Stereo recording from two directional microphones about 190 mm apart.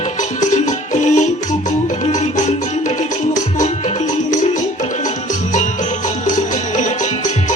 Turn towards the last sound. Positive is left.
turn(degrees=40)  # may be behind; listen again after turning